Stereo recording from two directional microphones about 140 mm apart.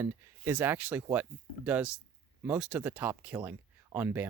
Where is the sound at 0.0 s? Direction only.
15° right (ahead or behind).